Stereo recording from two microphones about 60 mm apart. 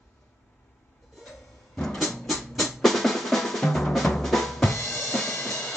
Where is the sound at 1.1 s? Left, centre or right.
Centre.